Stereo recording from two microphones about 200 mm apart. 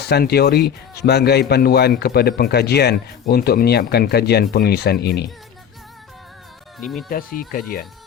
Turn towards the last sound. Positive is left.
turn(degrees=45)  # may be behind; listen again after turning